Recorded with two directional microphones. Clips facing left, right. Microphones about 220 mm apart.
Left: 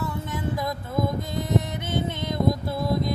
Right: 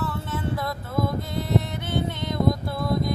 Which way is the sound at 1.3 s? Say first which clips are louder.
Even; 20° left (ahead or behind).